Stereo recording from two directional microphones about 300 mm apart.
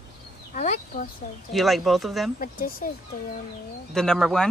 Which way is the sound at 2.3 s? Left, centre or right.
Left.